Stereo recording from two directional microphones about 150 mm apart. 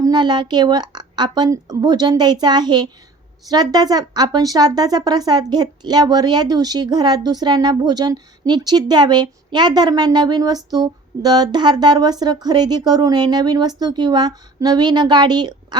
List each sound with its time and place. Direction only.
0.0 s speech: 30° right (ahead or behind)